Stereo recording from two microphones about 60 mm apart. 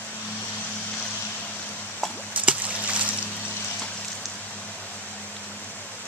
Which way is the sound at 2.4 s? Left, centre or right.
Right.